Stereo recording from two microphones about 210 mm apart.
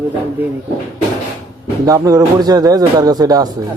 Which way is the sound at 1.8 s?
15° right (ahead or behind).